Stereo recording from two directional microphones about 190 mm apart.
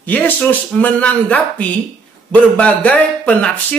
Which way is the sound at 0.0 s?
10° left (ahead or behind).